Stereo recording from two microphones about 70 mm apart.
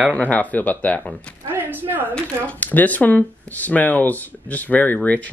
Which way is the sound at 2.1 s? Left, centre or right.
Left.